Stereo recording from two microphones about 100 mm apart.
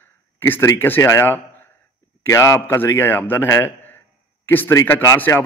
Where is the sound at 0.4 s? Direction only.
25° left (ahead or behind).